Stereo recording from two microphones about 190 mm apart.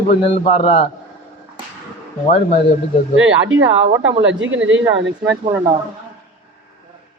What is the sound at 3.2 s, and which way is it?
Speech, 90° right.